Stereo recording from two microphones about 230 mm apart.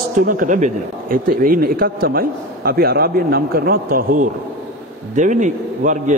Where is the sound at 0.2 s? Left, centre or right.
Right.